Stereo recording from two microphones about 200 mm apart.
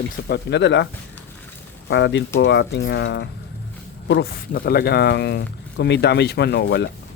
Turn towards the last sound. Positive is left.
turn(degrees=60)  # may be behind; listen again after turning